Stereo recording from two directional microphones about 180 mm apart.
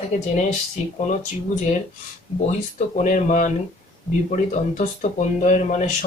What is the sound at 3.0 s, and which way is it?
Speech, 45° left (ahead or behind).